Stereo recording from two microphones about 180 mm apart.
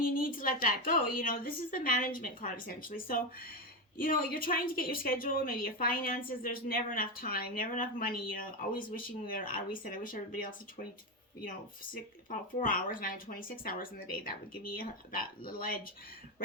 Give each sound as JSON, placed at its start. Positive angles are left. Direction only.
{"t": 0.2, "sound": "a woman's voice", "side_deg": 50}
{"t": 12.3, "sound": "a woman's voice", "side_deg": 50}
{"t": 15.4, "sound": "a woman's voice", "side_deg": 50}